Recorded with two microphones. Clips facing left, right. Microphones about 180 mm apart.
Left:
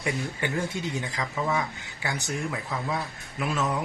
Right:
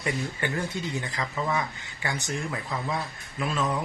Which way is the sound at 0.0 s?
15° left (ahead or behind).